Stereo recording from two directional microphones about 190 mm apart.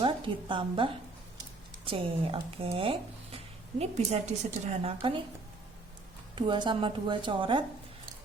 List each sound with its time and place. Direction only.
0.0 s a woman's voice: 25° right (ahead or behind)
6.3 s a woman's voice: 25° right (ahead or behind)